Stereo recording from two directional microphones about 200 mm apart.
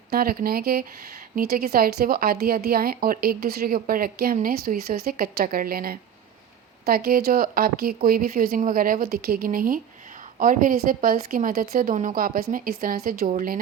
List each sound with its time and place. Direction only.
0.1 s speech: 45° right (ahead or behind)